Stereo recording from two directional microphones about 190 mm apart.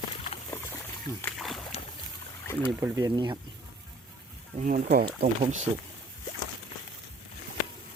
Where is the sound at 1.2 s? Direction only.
Centre (ahead or behind).